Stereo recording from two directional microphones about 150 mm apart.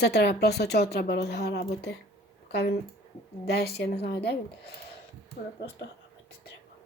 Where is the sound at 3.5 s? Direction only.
90° left.